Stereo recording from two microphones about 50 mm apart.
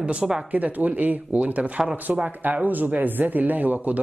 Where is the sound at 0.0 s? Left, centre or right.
Right.